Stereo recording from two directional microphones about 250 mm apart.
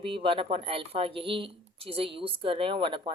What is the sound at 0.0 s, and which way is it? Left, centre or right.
Speech, right.